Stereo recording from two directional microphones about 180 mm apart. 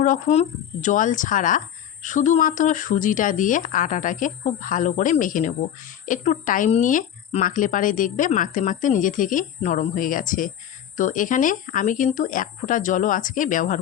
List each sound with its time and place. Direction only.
0.0 s speech: 40° left (ahead or behind)